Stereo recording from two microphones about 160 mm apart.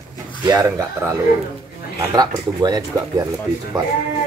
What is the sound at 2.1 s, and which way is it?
Speech, 25° right (ahead or behind).